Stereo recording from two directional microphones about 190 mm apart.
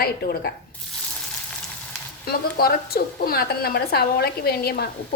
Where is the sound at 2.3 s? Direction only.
55° left (ahead or behind).